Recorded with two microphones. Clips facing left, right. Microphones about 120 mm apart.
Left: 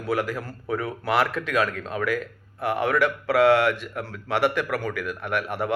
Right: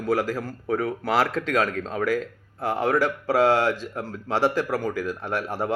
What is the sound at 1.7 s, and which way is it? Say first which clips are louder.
Speech: right 2 dB; 30° right (ahead or behind).